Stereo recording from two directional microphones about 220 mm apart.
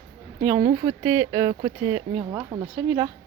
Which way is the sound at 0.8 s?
10° right (ahead or behind).